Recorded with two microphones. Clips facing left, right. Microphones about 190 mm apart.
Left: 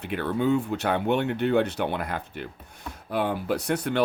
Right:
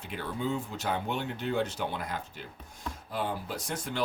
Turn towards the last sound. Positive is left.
turn(degrees=65)  # may be behind; listen again after turning